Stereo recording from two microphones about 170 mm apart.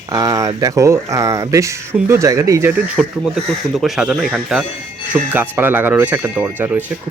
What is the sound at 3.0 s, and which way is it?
Speech, 5° right (ahead or behind).